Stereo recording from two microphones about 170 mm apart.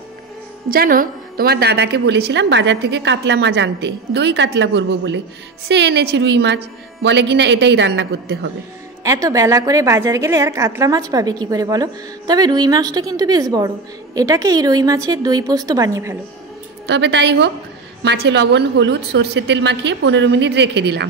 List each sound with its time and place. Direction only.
0.7 s a woman's voice: 55° right (ahead or behind); by 8.1 s 90° right
9.0 s a woman's voice: 20° right (ahead or behind)
16.8 s a woman's voice: 90° right